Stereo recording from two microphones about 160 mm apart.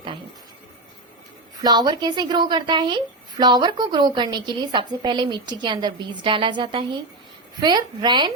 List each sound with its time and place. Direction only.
1.6 s a woman's voice: 25° right (ahead or behind)